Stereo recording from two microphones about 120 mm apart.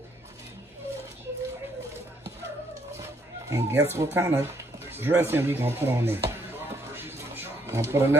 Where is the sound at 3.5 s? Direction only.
25° right (ahead or behind).